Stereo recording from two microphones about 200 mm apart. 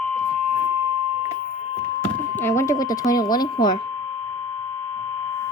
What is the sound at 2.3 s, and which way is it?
Speech, 15° left (ahead or behind).